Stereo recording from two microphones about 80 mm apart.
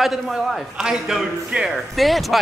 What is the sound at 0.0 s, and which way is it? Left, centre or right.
Speech, centre.